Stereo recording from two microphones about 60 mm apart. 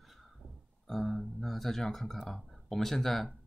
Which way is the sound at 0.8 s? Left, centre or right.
Centre.